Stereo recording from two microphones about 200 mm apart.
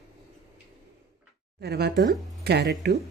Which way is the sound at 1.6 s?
55° right (ahead or behind).